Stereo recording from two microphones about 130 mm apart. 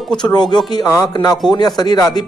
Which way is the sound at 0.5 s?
30° left (ahead or behind).